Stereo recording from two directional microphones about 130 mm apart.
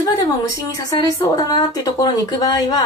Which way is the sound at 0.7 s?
25° left (ahead or behind).